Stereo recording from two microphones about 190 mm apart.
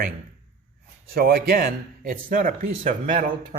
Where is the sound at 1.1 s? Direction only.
50° right (ahead or behind).